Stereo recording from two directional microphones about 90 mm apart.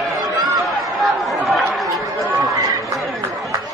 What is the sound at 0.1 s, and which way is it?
Chatter, 50° right (ahead or behind).